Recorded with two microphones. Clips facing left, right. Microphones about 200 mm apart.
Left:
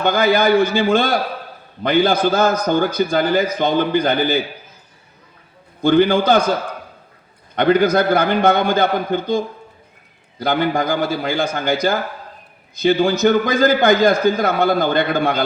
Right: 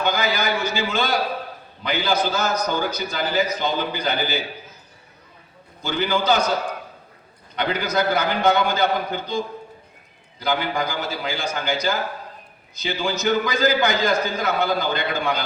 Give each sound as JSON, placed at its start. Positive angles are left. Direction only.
{"t": 0.0, "sound": "a man's voice", "side_deg": 55}
{"t": 5.8, "sound": "a man's voice", "side_deg": 55}
{"t": 7.5, "sound": "a man's voice", "side_deg": 55}
{"t": 10.4, "sound": "a man's voice", "side_deg": 55}